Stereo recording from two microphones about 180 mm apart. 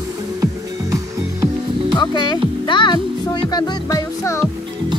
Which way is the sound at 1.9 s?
25° left (ahead or behind).